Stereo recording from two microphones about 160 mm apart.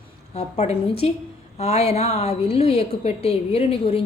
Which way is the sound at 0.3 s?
40° left (ahead or behind).